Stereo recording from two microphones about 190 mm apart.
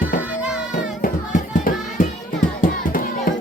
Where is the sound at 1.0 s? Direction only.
45° left (ahead or behind).